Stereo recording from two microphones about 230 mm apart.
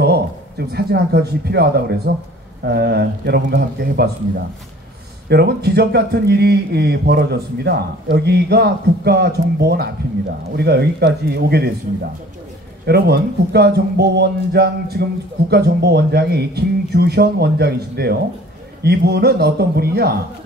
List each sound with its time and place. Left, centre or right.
0.0 s a man's voice: right
5.3 s a man's voice: right